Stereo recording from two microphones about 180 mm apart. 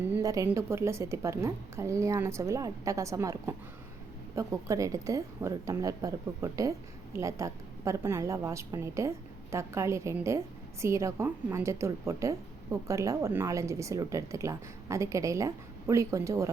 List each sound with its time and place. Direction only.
0.1 s a woman's voice: 20° right (ahead or behind)